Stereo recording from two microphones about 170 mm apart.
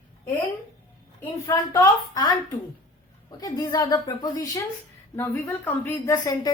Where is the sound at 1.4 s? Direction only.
20° left (ahead or behind).